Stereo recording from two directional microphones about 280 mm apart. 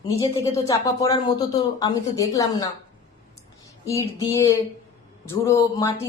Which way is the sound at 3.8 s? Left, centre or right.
Centre.